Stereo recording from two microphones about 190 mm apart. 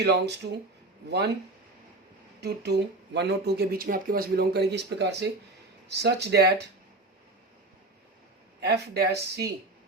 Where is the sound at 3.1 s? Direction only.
60° right (ahead or behind).